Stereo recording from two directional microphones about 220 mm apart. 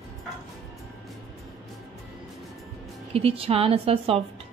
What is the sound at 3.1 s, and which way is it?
A woman's voice, 25° right (ahead or behind).